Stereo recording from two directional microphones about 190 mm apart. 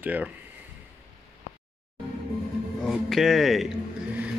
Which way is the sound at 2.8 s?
Centre (ahead or behind).